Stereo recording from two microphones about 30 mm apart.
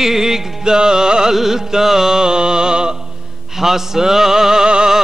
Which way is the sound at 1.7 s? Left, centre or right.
Centre.